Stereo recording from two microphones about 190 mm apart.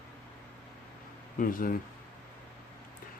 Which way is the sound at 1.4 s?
45° left (ahead or behind).